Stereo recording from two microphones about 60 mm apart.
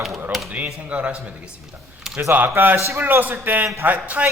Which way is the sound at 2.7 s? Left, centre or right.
Right.